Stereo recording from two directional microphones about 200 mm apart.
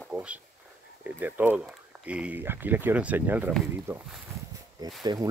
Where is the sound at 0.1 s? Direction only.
5° right (ahead or behind).